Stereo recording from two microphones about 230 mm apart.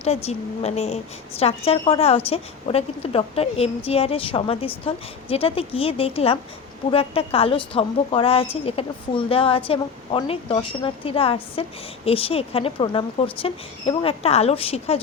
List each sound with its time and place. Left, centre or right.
0.0 s a woman's voice: left